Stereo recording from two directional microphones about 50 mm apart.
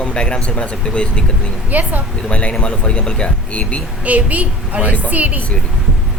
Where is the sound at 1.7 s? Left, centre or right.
Right.